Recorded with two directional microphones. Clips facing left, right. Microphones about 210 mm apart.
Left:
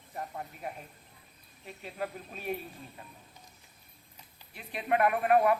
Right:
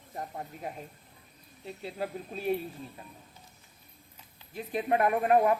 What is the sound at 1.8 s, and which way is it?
Speech, 30° right (ahead or behind).